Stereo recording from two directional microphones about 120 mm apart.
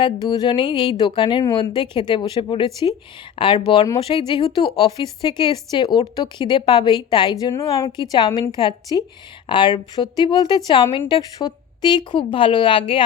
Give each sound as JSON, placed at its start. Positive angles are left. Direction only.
{"t": 0.0, "sound": "a woman's voice", "side_deg": 40}
{"t": 5.2, "sound": "a woman's voice", "side_deg": 40}
{"t": 7.5, "sound": "a woman's voice", "side_deg": 25}
{"t": 8.1, "sound": "a woman's voice", "side_deg": 35}